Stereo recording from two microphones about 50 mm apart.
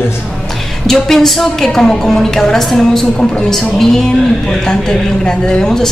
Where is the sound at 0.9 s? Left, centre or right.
Centre.